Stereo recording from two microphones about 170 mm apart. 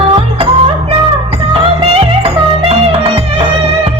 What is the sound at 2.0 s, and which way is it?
Music, 35° right (ahead or behind).